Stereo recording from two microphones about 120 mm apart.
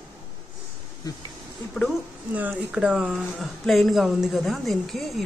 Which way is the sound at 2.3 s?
10° right (ahead or behind).